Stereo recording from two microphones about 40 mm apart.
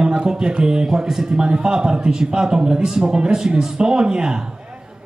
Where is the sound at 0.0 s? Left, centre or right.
Right.